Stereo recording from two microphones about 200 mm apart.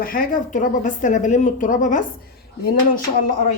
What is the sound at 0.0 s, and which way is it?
Speech, 45° left (ahead or behind).